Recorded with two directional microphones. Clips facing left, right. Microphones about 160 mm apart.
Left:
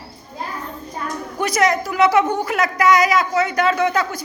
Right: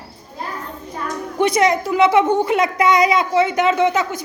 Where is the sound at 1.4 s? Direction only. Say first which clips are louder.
Right 3 dB; 25° right (ahead or behind).